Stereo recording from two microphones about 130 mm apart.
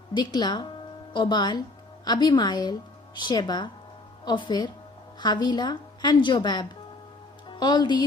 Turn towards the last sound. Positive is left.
turn(degrees=35)  # may be behind; listen again after turning